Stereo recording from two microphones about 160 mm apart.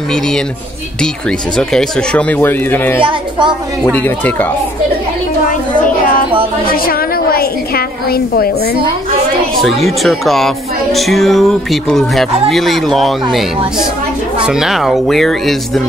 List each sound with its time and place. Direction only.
1.6 s speech: 5° left (ahead or behind)
3.0 s a child's voice: 30° right (ahead or behind)
3.8 s speech: 10° left (ahead or behind)
6.7 s a woman's voice: 65° left (ahead or behind)
9.6 s speech: centre (ahead or behind)